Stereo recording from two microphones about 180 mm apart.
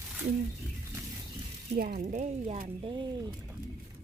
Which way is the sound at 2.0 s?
40° right (ahead or behind).